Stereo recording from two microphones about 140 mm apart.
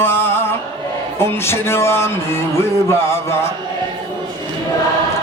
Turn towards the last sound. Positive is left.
turn(degrees=20)  # may be behind; listen again after turning